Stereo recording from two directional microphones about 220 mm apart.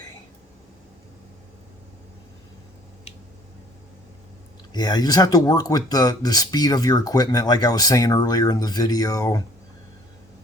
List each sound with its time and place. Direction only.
4.7 s speech: 20° left (ahead or behind)